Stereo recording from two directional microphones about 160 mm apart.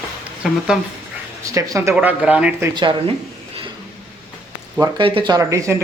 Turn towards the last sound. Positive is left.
turn(degrees=-20)  # may be behind; listen again after turning